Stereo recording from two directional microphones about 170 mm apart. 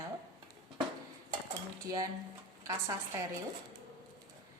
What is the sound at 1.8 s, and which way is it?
Speech, 20° right (ahead or behind).